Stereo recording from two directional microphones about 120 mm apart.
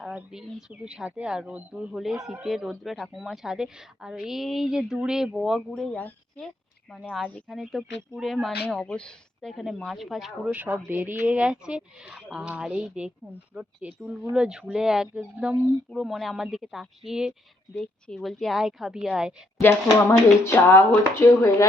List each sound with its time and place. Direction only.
0.0 s speech: 10° right (ahead or behind); by 6.4 s 10° left (ahead or behind)
6.9 s speech: centre (ahead or behind)
10.5 s speech: 15° right (ahead or behind)
19.5 s speech: 20° left (ahead or behind)